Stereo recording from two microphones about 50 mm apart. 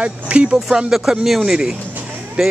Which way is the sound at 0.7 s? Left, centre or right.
Centre.